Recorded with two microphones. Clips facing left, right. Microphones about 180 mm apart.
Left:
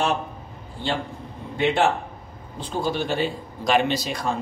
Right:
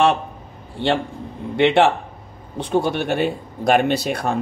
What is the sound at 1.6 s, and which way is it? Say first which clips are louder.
Speech: right 5 dB; 70° right (ahead or behind).